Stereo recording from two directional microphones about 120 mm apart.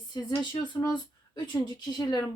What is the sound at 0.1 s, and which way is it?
Speech, 35° left (ahead or behind).